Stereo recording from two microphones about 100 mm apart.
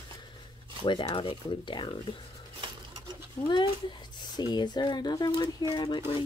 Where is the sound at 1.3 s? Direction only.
50° left (ahead or behind).